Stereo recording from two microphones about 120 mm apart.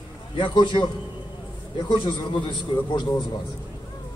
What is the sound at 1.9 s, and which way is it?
Speech, 45° left (ahead or behind).